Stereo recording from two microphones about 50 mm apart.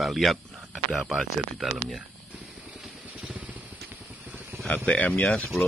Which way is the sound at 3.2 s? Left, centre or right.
Right.